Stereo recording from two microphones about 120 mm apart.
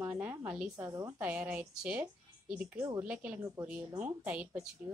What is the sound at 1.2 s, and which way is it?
A woman's voice, 15° right (ahead or behind).